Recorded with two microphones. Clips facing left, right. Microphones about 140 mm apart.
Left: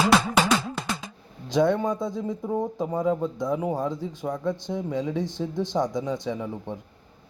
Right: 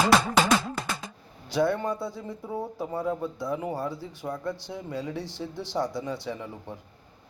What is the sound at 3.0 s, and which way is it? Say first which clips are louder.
Speech: left 5 dB; 5° right (ahead or behind).